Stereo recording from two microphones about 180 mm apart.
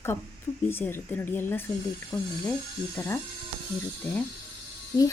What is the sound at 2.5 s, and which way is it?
Speech, 10° left (ahead or behind).